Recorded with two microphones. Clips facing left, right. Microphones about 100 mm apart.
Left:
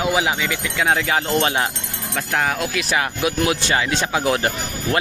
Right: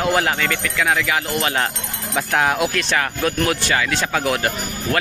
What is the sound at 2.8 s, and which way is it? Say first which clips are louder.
Speech: even; 10° left (ahead or behind).